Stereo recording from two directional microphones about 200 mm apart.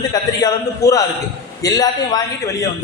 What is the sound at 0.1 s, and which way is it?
A man's voice, 20° left (ahead or behind).